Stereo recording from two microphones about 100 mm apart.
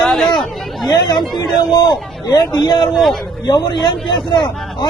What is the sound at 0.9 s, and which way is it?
Speech, 45° left (ahead or behind).